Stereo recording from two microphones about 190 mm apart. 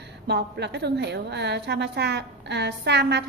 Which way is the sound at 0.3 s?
60° right (ahead or behind).